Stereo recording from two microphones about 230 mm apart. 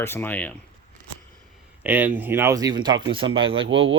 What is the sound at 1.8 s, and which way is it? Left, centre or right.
Speech, centre.